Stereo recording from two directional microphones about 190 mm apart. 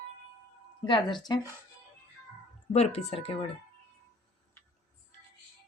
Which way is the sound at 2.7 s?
35° left (ahead or behind).